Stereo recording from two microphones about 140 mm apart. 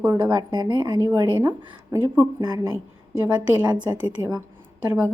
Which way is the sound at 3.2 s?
10° right (ahead or behind).